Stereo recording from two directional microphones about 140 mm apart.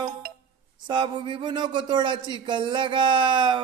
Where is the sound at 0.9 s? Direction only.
35° right (ahead or behind).